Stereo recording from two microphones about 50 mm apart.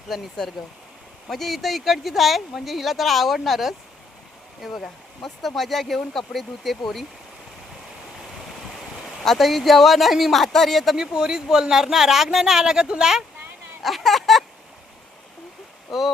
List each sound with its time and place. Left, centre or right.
0.1 s speech: centre
1.3 s speech: centre
9.2 s speech: centre
10.9 s speech: centre
13.8 s speech: centre
15.9 s speech: centre